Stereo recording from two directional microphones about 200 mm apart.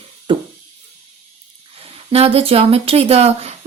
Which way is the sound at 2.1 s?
30° right (ahead or behind).